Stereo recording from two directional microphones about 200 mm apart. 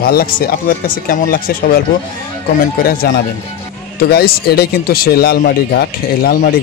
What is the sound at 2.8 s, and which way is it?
Speech, 45° left (ahead or behind).